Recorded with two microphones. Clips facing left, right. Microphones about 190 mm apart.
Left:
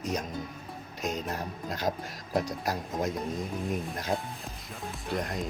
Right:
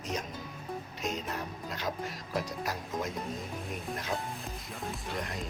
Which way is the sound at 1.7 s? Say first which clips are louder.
Left 5 dB; 40° left (ahead or behind).